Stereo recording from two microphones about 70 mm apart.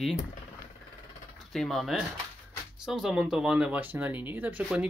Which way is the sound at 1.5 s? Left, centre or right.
Centre.